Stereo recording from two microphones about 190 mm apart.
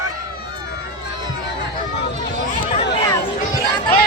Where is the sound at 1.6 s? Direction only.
60° left (ahead or behind).